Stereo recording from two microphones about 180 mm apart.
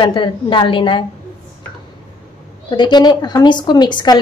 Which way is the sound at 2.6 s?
25° left (ahead or behind).